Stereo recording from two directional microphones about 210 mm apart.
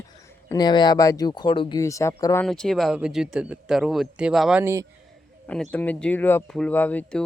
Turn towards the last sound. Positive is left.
turn(degrees=5)  # may be behind; listen again after turning